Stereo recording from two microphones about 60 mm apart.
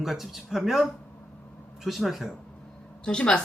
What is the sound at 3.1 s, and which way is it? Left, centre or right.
Speech, centre.